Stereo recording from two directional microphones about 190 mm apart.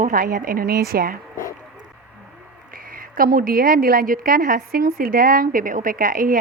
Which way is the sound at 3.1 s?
50° right (ahead or behind).